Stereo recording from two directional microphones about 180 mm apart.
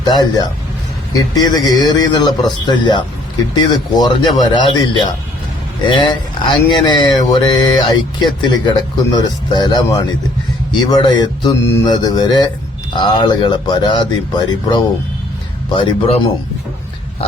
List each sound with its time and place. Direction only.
0.0 s mantra: 20° left (ahead or behind)
11.6 s mantra: 15° left (ahead or behind)
15.7 s speech: 30° left (ahead or behind)